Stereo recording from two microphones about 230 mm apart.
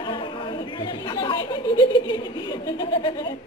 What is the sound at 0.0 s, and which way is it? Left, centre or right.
Speech, left.